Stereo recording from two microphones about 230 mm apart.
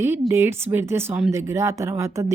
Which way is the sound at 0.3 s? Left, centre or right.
Centre.